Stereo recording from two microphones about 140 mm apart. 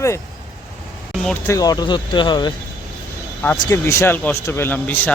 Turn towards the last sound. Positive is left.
turn(degrees=15)  # may be behind; listen again after turning